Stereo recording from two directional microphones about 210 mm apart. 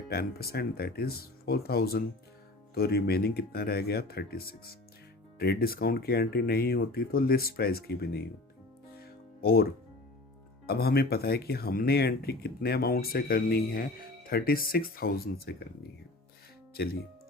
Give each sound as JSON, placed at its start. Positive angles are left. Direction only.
{"t": 0.1, "sound": "speech", "side_deg": 50}
{"t": 9.4, "sound": "speech", "side_deg": 45}
{"t": 10.7, "sound": "speech", "side_deg": 45}